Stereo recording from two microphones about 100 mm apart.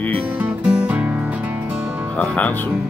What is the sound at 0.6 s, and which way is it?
Music, 10° right (ahead or behind).